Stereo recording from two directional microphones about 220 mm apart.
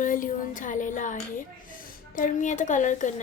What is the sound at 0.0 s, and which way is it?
Speech, 35° left (ahead or behind).